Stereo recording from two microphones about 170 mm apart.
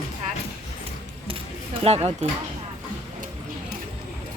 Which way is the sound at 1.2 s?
30° right (ahead or behind).